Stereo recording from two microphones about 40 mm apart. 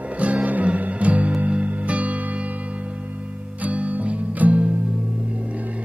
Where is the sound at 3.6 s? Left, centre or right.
Right.